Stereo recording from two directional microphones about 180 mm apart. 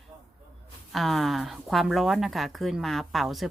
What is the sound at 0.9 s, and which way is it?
Speech, centre (ahead or behind).